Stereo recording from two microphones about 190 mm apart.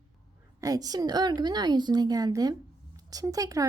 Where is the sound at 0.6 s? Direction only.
20° right (ahead or behind).